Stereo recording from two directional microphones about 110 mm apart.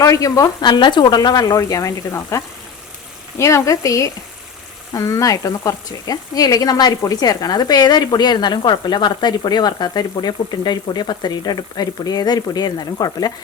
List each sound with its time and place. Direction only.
0.0 s speech: 30° left (ahead or behind)
0.6 s speech: 45° left (ahead or behind)